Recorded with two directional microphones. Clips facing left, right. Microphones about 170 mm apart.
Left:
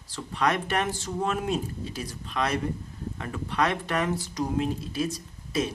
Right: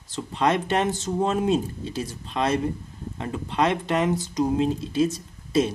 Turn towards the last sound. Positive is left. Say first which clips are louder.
# right 6 dB
turn(degrees=-25)  # may be behind; listen again after turning